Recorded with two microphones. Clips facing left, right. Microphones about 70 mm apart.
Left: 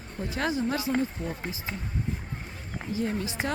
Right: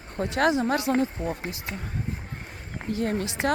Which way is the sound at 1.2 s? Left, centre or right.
Right.